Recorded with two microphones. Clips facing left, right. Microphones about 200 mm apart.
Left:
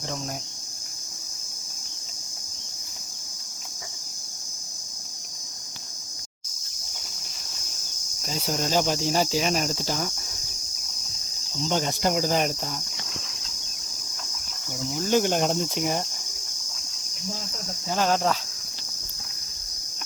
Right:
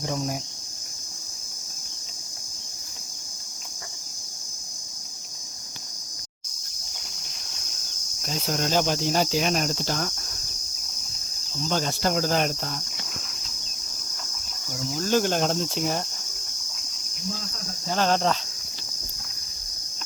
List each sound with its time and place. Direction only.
8.2 s cricket: 5° left (ahead or behind)
11.7 s cricket: 15° left (ahead or behind)
14.7 s cricket: 15° left (ahead or behind)
17.8 s cricket: 5° left (ahead or behind)